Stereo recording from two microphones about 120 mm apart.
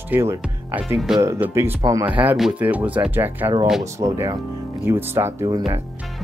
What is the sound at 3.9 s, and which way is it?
Speech, 25° right (ahead or behind).